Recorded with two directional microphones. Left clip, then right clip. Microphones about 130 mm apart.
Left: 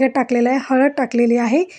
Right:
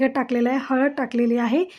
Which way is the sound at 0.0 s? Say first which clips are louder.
Left 5 dB; 30° left (ahead or behind).